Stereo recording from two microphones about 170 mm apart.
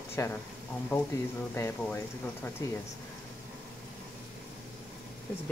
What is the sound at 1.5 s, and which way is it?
Speech, 15° left (ahead or behind).